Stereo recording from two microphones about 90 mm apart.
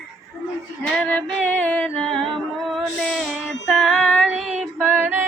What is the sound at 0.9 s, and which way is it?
Music, 15° left (ahead or behind).